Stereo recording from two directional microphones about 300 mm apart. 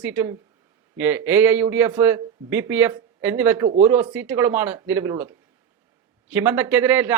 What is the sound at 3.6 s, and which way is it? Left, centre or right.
Speech, right.